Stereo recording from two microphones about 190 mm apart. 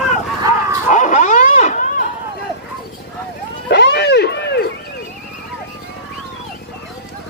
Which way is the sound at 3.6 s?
65° left (ahead or behind).